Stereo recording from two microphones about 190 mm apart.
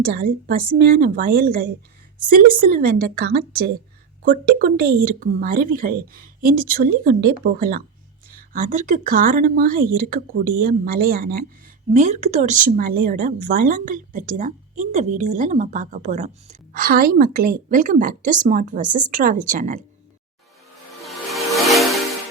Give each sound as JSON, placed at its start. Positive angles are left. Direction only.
{"t": 0.1, "sound": "speech", "side_deg": -50}
{"t": 11.9, "sound": "speech", "side_deg": -40}
{"t": 21.0, "sound": "music", "side_deg": 0}